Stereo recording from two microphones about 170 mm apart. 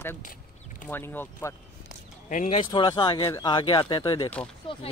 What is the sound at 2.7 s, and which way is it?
A man's voice, 25° left (ahead or behind).